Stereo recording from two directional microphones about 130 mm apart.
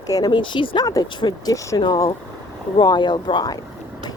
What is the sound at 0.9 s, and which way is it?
Speech, 25° left (ahead or behind).